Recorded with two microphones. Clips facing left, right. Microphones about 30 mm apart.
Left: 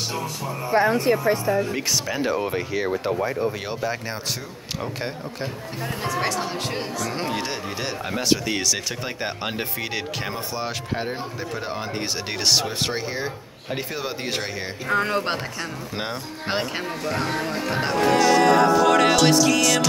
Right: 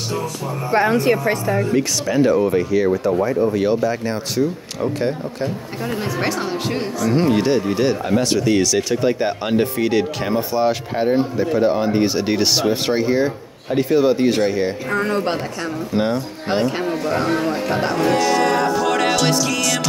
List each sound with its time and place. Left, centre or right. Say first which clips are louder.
0.7 s speech: right 3 dB; right
1.7 s speech: right 6 dB; centre
3.5 s speech: right 9 dB; centre
6.2 s speech: right 4 dB; centre